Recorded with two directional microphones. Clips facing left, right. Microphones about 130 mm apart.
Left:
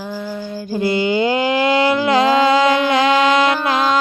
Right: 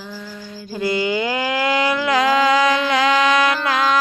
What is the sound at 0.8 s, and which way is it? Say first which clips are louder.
Mantra: left 3 dB; 25° left (ahead or behind).